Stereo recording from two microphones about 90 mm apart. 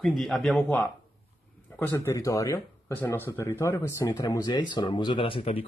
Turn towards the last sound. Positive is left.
turn(degrees=90)